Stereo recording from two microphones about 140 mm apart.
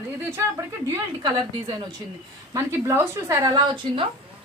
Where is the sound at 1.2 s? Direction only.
30° right (ahead or behind).